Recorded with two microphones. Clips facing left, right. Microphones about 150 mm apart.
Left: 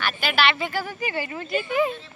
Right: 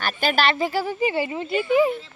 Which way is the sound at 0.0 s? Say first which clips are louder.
Right 2 dB; 40° right (ahead or behind).